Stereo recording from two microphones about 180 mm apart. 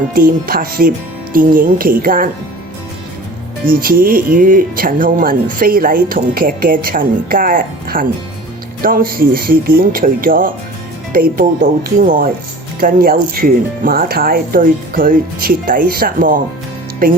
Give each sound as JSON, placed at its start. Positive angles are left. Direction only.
{"t": 0.1, "sound": "speech", "side_deg": -50}
{"t": 3.7, "sound": "speech", "side_deg": -55}